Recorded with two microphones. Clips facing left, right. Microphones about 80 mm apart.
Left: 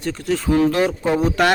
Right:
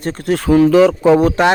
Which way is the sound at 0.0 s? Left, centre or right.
Right.